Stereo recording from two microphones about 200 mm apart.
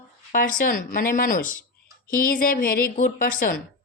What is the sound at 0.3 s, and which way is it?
A woman's voice, 40° left (ahead or behind).